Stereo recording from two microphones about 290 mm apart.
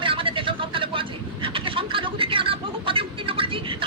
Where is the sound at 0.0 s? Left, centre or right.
Centre.